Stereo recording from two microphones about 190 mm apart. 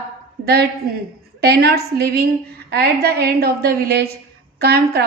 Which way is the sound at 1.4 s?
55° right (ahead or behind).